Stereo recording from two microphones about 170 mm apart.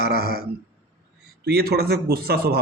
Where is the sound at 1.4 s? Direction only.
70° right (ahead or behind).